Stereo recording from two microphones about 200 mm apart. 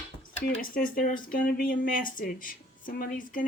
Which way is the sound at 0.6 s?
45° left (ahead or behind).